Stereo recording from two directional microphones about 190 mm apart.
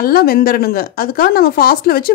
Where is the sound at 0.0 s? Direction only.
50° left (ahead or behind).